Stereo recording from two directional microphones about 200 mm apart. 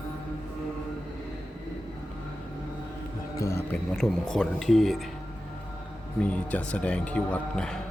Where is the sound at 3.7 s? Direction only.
Centre (ahead or behind).